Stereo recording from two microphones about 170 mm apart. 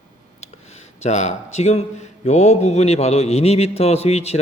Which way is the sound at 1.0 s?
45° left (ahead or behind).